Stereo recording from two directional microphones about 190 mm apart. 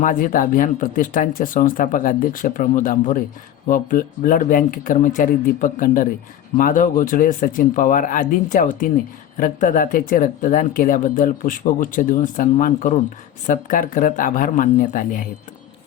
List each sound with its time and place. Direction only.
0.0 s speech: 45° left (ahead or behind)